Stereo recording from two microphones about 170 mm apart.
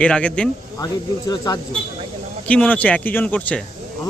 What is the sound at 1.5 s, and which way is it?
Speech, 25° left (ahead or behind).